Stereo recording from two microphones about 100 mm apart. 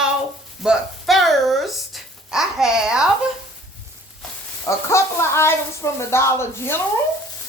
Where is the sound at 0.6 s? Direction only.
5° right (ahead or behind).